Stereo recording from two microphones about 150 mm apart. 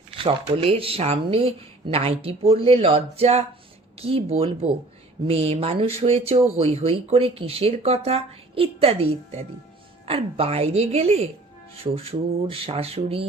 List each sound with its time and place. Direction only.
0.2 s speech: 40° right (ahead or behind)